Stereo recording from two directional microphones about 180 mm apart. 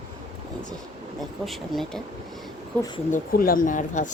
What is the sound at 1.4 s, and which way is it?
Speech, centre (ahead or behind).